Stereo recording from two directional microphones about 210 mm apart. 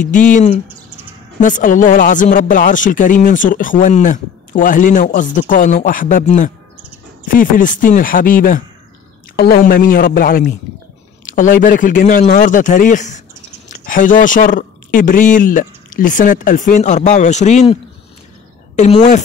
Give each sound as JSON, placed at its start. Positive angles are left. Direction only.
{"t": 0.0, "sound": "speech", "side_deg": 40}
{"t": 18.8, "sound": "speech", "side_deg": 30}